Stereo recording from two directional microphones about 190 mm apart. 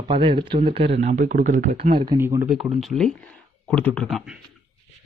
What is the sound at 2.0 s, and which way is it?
Speech, 15° right (ahead or behind).